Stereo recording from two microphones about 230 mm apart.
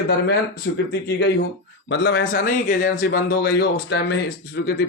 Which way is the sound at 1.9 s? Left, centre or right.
Left.